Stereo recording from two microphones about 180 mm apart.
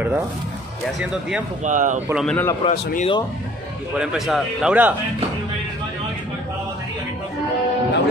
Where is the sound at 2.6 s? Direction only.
30° left (ahead or behind).